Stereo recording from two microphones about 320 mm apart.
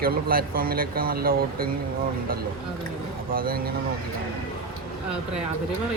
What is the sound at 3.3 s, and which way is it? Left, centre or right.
Speech, right.